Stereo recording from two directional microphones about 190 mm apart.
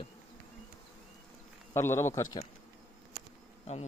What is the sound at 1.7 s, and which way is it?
Speech, 15° left (ahead or behind).